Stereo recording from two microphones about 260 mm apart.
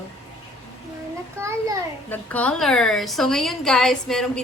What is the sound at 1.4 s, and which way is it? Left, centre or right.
Speech, centre.